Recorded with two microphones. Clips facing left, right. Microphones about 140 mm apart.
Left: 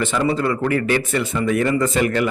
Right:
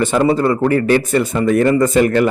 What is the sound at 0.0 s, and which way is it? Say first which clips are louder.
A man's voice: right 6 dB; 40° right (ahead or behind).